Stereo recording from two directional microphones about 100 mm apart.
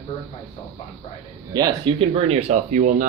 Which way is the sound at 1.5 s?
40° right (ahead or behind).